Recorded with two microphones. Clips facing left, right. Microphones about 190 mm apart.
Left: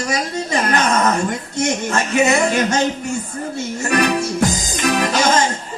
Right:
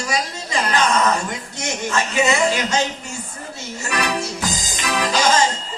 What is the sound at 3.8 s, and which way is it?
Music, 50° left (ahead or behind).